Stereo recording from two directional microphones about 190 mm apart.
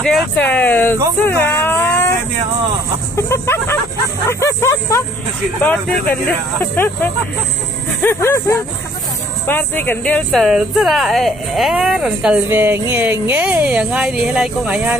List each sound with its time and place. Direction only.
0.0 s speech: 5° left (ahead or behind)
1.2 s a sound: 10° left (ahead or behind)
3.2 s speech: 10° left (ahead or behind)
6.2 s speech: 10° left (ahead or behind); by 15.0 s 5° right (ahead or behind)